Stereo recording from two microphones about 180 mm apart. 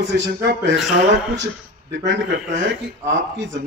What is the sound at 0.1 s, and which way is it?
Speech, 65° right (ahead or behind).